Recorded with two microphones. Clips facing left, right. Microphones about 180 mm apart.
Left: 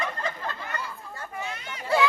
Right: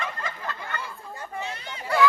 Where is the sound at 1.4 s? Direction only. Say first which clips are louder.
Even; 30° right (ahead or behind).